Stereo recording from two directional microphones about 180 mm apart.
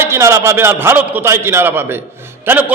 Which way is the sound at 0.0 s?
15° right (ahead or behind).